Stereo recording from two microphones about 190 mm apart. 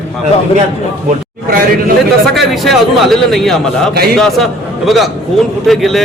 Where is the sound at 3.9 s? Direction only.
55° right (ahead or behind).